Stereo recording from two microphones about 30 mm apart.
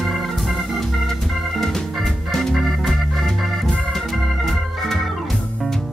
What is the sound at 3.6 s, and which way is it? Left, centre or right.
Organ, centre.